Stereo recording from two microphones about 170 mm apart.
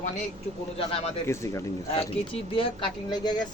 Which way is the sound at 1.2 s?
15° left (ahead or behind).